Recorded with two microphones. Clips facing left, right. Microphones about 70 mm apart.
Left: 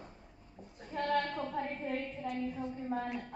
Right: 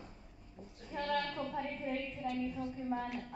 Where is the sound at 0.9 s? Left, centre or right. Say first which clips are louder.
Left 3 dB; left.